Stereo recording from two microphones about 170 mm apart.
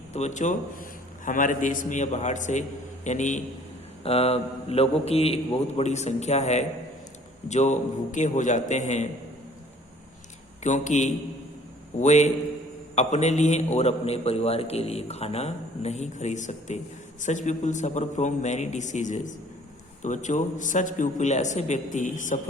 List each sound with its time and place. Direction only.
0.1 s a man's voice: 40° left (ahead or behind)
10.6 s a man's voice: 45° left (ahead or behind)